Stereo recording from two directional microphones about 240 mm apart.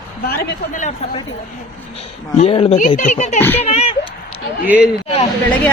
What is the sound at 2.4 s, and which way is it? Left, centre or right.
Speech, left.